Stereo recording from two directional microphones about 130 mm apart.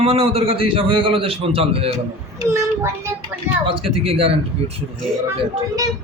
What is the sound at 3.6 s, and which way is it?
Speech, 45° right (ahead or behind).